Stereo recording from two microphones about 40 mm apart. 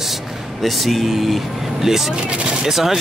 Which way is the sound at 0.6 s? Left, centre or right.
Centre.